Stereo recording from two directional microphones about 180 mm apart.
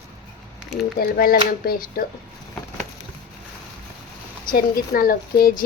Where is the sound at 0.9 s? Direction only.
55° left (ahead or behind).